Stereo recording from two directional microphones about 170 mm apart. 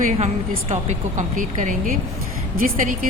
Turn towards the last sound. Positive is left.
turn(degrees=-50)  # may be behind; listen again after turning